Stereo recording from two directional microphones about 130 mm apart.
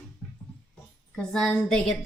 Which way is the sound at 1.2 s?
5° left (ahead or behind).